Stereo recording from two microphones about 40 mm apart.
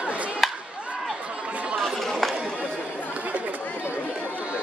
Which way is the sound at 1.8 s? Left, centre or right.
Centre.